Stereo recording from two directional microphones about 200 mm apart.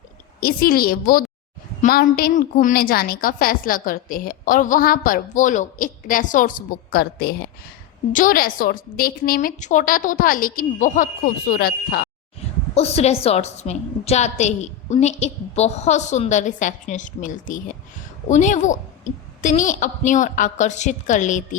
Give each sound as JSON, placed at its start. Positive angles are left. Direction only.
{"t": 0.3, "sound": "a woman's voice", "side_deg": 45}
{"t": 12.7, "sound": "a woman's voice", "side_deg": 30}